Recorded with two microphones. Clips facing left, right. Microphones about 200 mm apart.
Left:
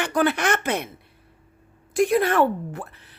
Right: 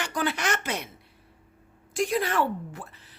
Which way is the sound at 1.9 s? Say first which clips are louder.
Left 6 dB; 55° left (ahead or behind).